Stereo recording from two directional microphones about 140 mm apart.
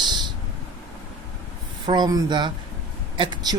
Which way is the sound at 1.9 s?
30° right (ahead or behind).